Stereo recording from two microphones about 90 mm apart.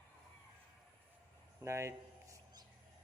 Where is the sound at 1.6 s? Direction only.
35° right (ahead or behind).